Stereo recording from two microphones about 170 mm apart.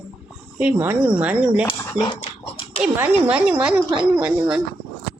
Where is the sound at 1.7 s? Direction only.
25° left (ahead or behind).